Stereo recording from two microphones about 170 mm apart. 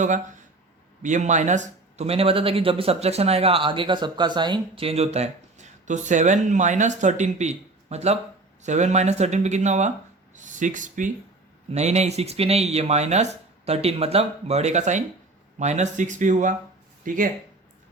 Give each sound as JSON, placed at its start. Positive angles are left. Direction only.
{"t": 1.0, "sound": "speech", "side_deg": -45}